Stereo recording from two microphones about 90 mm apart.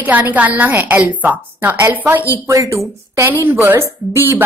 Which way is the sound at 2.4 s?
35° right (ahead or behind).